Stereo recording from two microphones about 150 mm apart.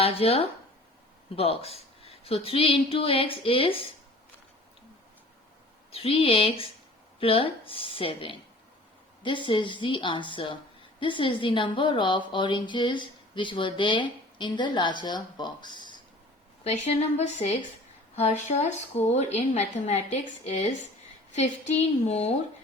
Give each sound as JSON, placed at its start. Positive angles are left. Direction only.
{"t": 0.0, "sound": "a woman's voice", "side_deg": 40}
{"t": 5.9, "sound": "a woman's voice", "side_deg": 40}
{"t": 16.6, "sound": "a woman's voice", "side_deg": 45}